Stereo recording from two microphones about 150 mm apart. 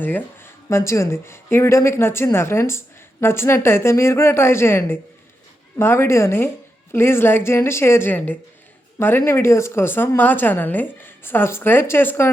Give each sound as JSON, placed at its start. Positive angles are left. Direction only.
{"t": 0.0, "sound": "speech", "side_deg": 15}